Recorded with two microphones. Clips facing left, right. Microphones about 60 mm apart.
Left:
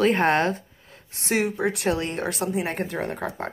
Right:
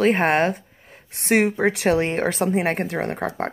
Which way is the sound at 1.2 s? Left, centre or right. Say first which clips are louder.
Right 5 dB; right.